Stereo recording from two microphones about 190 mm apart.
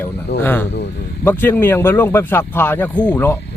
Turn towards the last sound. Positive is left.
turn(degrees=10)  # may be behind; listen again after turning